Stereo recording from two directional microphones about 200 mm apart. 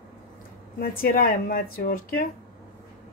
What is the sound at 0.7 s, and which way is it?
Speech, 45° left (ahead or behind).